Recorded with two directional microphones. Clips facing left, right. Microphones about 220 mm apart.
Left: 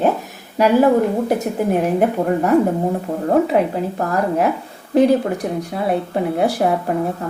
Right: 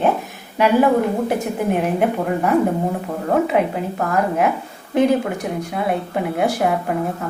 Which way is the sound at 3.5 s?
35° left (ahead or behind).